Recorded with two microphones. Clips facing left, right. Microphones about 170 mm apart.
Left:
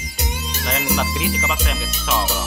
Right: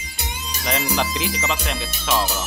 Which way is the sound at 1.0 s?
5° left (ahead or behind).